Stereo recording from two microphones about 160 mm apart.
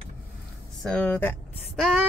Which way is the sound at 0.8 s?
5° left (ahead or behind).